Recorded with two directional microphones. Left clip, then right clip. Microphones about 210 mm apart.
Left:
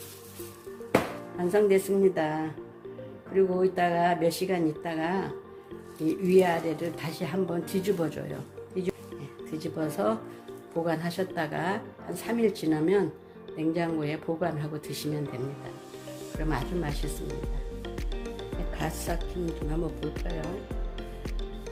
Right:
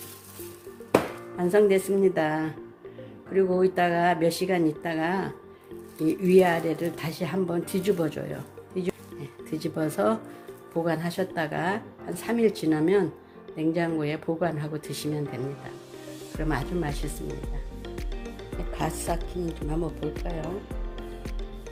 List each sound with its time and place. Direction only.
1.4 s speech: 20° right (ahead or behind)
16.4 s speech: 15° right (ahead or behind)
17.8 s music: centre (ahead or behind)
18.7 s speech: 15° right (ahead or behind)
19.9 s speech: centre (ahead or behind)